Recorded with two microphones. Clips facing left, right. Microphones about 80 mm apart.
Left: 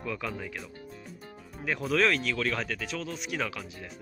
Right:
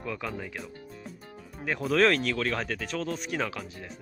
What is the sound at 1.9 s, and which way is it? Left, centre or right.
Speech, right.